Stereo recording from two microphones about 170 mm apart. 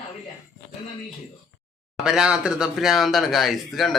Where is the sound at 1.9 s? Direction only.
5° right (ahead or behind).